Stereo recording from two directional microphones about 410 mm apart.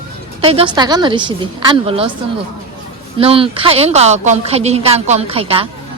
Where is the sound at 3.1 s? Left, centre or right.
Centre.